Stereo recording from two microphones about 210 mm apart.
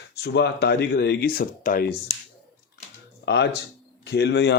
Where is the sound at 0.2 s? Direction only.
50° left (ahead or behind).